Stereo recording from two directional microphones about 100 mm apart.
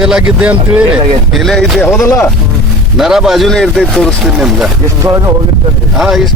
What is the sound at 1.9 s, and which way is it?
Speech, 30° left (ahead or behind).